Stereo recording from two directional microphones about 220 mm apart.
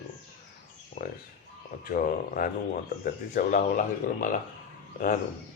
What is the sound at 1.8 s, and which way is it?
A man's voice, 40° left (ahead or behind).